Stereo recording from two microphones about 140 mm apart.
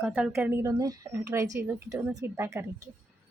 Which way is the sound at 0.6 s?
25° right (ahead or behind).